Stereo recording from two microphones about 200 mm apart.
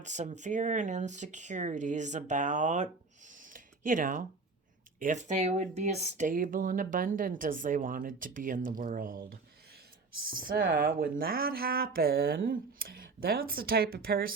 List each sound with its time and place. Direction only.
0.0 s speech: 35° right (ahead or behind)